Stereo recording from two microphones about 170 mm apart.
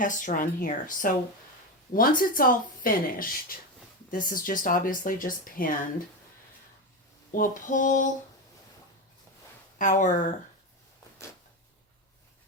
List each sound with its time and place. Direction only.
0.0 s speech: 50° left (ahead or behind)
7.3 s speech: 50° left (ahead or behind)
9.7 s speech: 50° left (ahead or behind)